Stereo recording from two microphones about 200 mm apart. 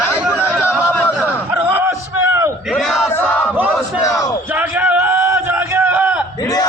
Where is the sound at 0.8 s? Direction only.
10° left (ahead or behind).